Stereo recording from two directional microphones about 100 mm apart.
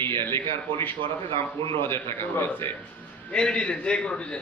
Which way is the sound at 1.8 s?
20° left (ahead or behind).